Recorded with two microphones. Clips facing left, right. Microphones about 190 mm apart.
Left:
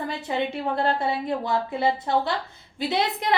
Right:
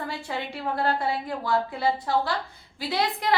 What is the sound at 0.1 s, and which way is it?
A woman's voice, 20° left (ahead or behind).